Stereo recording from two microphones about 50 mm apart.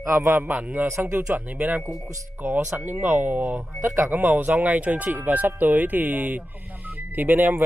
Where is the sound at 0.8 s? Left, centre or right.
Right.